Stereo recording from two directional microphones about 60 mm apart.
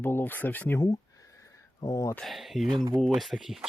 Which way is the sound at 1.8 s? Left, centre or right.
Left.